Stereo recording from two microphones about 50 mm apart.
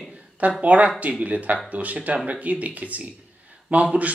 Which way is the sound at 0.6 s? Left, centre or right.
Right.